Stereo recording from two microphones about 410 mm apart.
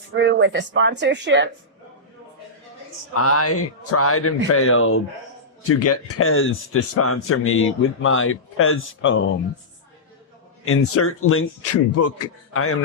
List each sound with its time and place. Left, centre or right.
0.2 s a woman's voice: right
3.2 s a man's voice: left
10.7 s a man's voice: left